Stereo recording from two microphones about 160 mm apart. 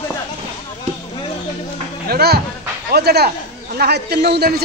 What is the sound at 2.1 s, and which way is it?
Speech, 80° right.